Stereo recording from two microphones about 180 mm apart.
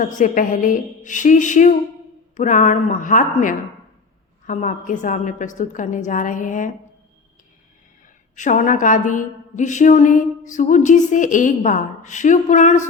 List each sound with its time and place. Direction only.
0.0 s a woman's voice: 45° left (ahead or behind)
8.4 s a woman's voice: 45° left (ahead or behind)